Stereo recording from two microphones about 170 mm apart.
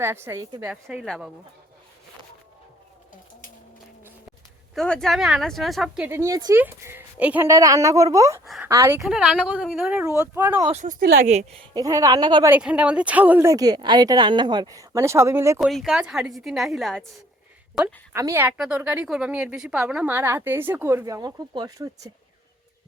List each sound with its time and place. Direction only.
0.0 s a woman's voice: 15° right (ahead or behind)
0.7 s speech: 5° right (ahead or behind)
4.7 s speech: 5° left (ahead or behind)
6.1 s a woman's voice: 15° right (ahead or behind)
8.4 s speech: 5° right (ahead or behind)
8.7 s a woman's voice: 20° right (ahead or behind)
9.0 s speech: 5° right (ahead or behind)
10.7 s a woman's voice: 40° right (ahead or behind)
11.7 s a woman's voice: 20° right (ahead or behind)
12.5 s a woman's voice: 10° right (ahead or behind)
15.5 s speech: centre (ahead or behind)
18.1 s a woman's voice: 15° right (ahead or behind)